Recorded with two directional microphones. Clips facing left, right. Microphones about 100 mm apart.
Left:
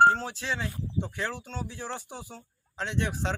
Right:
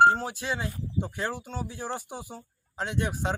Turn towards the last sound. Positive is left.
turn(degrees=-10)  # may be behind; listen again after turning